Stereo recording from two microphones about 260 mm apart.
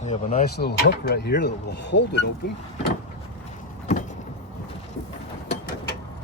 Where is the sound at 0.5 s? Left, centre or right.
Left.